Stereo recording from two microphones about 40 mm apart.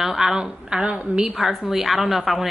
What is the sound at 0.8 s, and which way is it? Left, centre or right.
Speech, right.